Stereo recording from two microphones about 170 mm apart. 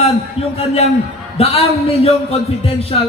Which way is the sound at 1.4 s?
35° left (ahead or behind).